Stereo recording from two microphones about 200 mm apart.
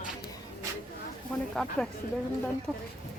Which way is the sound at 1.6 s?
Centre (ahead or behind).